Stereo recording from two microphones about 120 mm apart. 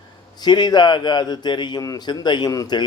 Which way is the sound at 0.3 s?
35° left (ahead or behind).